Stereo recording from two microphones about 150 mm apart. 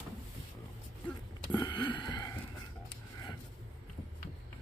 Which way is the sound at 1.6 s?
30° left (ahead or behind).